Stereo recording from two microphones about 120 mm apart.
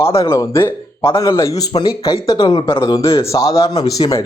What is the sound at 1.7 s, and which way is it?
Speech, 40° left (ahead or behind).